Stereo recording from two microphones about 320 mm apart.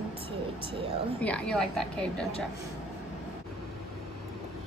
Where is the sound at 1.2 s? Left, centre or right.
Centre.